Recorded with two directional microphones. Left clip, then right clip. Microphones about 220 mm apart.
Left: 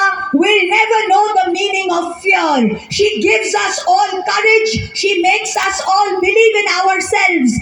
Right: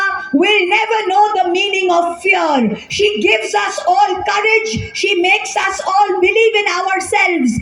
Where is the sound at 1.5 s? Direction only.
40° left (ahead or behind).